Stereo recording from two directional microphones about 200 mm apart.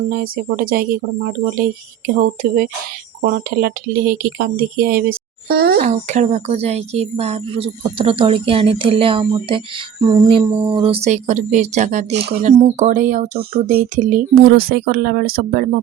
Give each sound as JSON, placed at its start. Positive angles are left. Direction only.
{"t": 0.1, "sound": "speech", "side_deg": -50}